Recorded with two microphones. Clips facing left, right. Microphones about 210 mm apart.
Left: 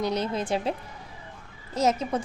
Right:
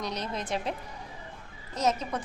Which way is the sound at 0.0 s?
30° left (ahead or behind).